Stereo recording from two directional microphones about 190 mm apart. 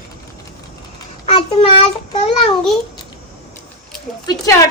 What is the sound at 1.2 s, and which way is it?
Speech, 35° left (ahead or behind).